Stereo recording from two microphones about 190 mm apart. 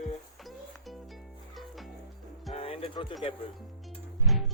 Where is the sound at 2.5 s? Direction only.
30° left (ahead or behind).